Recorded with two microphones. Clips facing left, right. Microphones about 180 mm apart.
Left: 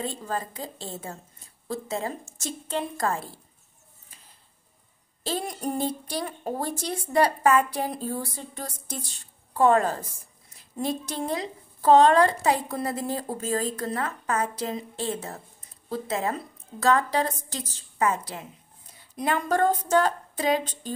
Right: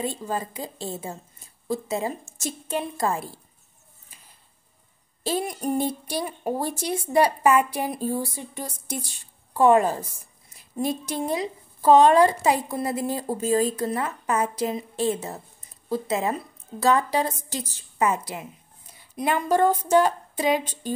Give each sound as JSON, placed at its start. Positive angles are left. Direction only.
{"t": 0.0, "sound": "speech", "side_deg": -15}
{"t": 5.2, "sound": "speech", "side_deg": -10}